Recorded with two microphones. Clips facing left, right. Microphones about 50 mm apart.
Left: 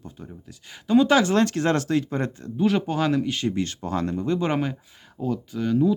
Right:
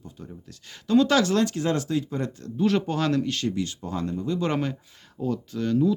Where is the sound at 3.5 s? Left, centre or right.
Left.